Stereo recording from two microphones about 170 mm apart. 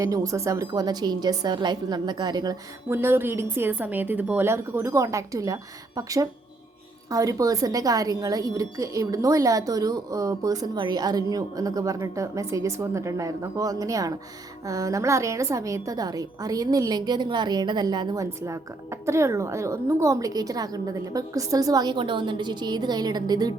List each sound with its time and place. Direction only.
0.0 s a woman's voice: 20° right (ahead or behind)